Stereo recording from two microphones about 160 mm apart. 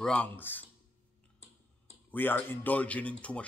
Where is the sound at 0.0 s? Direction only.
5° left (ahead or behind).